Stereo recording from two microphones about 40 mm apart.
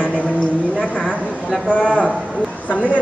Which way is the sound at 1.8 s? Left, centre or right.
Left.